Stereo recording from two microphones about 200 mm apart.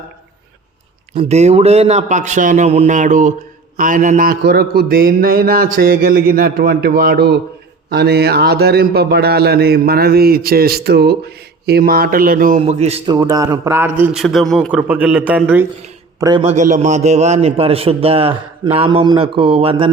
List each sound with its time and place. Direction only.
1.1 s a man's voice: 35° right (ahead or behind)
13.1 s a man's voice: 15° right (ahead or behind)
16.4 s a man's voice: 35° right (ahead or behind)